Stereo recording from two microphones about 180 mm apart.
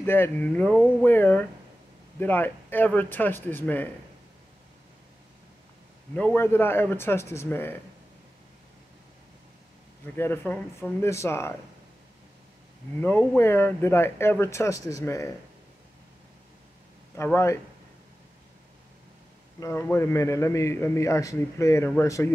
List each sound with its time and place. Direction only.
0.0 s a man's voice: 10° left (ahead or behind)
6.1 s a man's voice: 10° left (ahead or behind)
10.1 s a man's voice: 10° left (ahead or behind)
13.4 s a man's voice: 15° left (ahead or behind)
17.2 s a man's voice: 15° left (ahead or behind)
19.6 s a man's voice: 15° left (ahead or behind)